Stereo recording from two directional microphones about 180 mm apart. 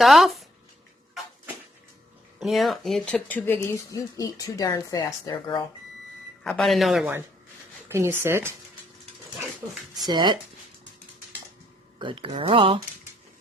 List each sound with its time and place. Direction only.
0.0 s speech: centre (ahead or behind)
2.4 s speech: centre (ahead or behind); by 5.6 s 25° left (ahead or behind)
6.4 s speech: centre (ahead or behind)
7.9 s speech: 15° right (ahead or behind)
10.1 s speech: 25° right (ahead or behind)
11.9 s speech: 30° right (ahead or behind)